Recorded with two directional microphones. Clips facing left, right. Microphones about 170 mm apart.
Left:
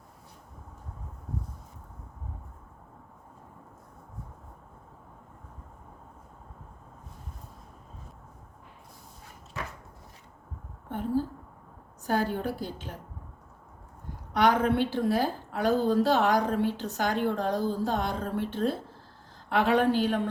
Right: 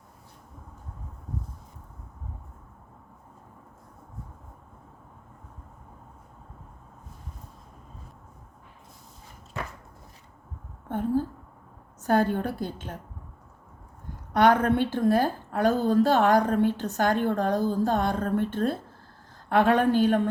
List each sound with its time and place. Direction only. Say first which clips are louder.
10.8 s a sound: right 3 dB; 50° right (ahead or behind)
12.0 s a woman's voice: right 4 dB; 50° right (ahead or behind)
14.3 s a woman's voice: right 3 dB; 50° right (ahead or behind)